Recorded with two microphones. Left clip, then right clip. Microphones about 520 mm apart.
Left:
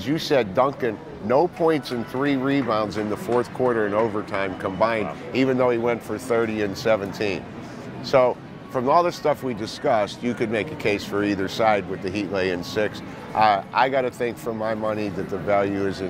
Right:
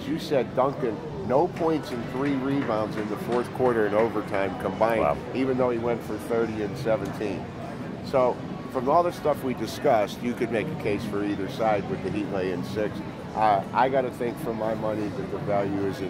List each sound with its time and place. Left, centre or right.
0.0 s speech: left
3.3 s speech: left
9.6 s speech: left